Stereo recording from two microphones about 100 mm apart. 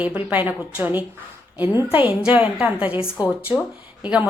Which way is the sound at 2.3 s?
15° right (ahead or behind).